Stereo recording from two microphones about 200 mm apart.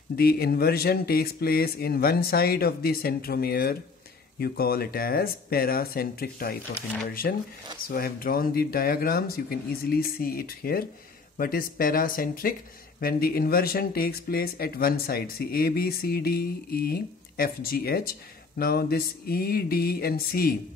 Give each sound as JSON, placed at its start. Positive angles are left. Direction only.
{"t": 0.1, "sound": "speech", "side_deg": 50}